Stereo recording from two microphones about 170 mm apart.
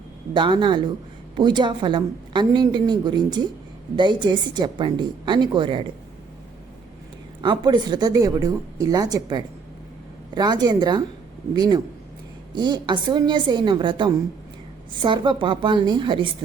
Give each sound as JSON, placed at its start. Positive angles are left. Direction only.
{"t": 0.3, "sound": "a woman's voice", "side_deg": -30}
{"t": 7.4, "sound": "a woman's voice", "side_deg": -25}